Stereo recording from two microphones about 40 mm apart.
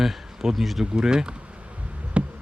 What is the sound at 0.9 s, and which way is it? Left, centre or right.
Speech, centre.